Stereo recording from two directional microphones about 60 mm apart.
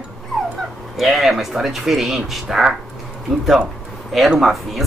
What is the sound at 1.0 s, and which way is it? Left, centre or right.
Speech, centre.